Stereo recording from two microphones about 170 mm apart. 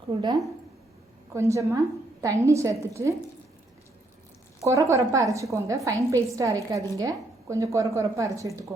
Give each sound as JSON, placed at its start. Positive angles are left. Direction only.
{"t": 0.2, "sound": "a woman's voice", "side_deg": -25}
{"t": 4.6, "sound": "a woman's voice", "side_deg": -20}